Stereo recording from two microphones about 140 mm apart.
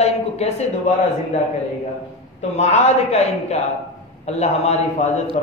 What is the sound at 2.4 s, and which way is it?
A woman's voice, 50° left (ahead or behind).